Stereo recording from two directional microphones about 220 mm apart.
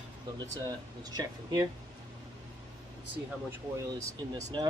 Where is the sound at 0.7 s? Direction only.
15° right (ahead or behind).